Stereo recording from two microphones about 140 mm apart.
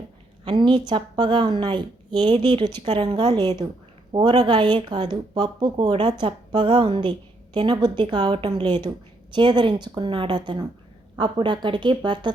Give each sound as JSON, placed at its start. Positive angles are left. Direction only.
{"t": 0.4, "sound": "a woman's voice", "side_deg": -35}